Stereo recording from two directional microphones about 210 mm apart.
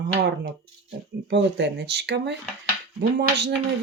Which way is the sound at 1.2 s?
55° right (ahead or behind).